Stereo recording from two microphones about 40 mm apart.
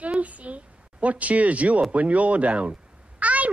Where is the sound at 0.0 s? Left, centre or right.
Right.